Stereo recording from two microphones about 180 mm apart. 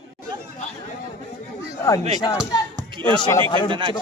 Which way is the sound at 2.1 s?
20° left (ahead or behind).